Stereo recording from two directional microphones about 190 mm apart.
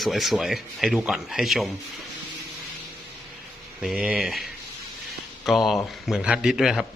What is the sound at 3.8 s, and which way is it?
Speech, 5° right (ahead or behind).